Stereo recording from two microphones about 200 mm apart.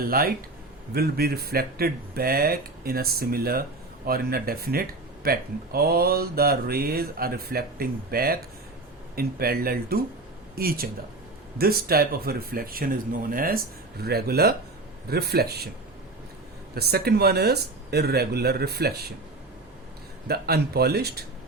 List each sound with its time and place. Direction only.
0.1 s speech: 50° right (ahead or behind)
16.7 s speech: 50° right (ahead or behind)
20.2 s speech: 50° right (ahead or behind)